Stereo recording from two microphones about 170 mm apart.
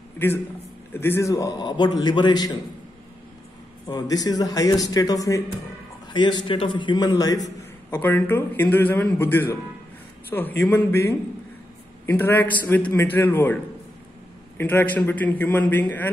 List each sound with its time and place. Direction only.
0.2 s a man's voice: 10° left (ahead or behind)
3.8 s speech: 20° left (ahead or behind)
7.9 s a man's voice: 10° left (ahead or behind)
10.6 s a man's voice: 15° left (ahead or behind)
14.6 s a man's voice: 10° left (ahead or behind)